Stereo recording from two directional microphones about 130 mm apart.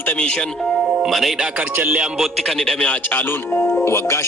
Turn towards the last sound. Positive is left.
turn(degrees=20)  # may be behind; listen again after turning